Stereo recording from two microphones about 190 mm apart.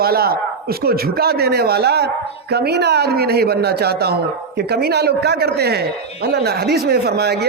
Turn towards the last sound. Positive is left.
turn(degrees=-60)  # may be behind; listen again after turning